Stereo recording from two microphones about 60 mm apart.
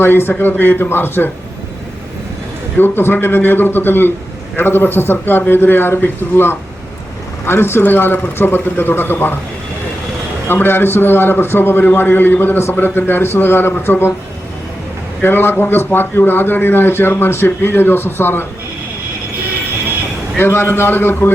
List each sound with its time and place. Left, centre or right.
0.0 s a man's voice: left
2.7 s a man's voice: left
10.5 s a man's voice: left
15.2 s a man's voice: left
20.4 s a man's voice: left